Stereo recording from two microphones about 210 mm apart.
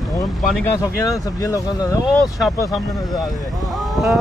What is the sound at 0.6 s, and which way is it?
Speech, 15° left (ahead or behind).